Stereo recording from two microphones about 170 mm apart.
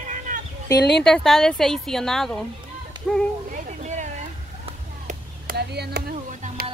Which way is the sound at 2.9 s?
25° right (ahead or behind).